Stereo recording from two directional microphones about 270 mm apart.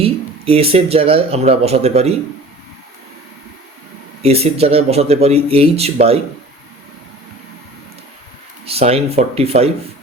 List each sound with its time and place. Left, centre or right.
0.0 s speech: right
4.2 s speech: right
8.6 s speech: right